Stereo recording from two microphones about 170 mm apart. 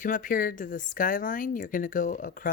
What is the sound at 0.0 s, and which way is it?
Speech, 50° left (ahead or behind).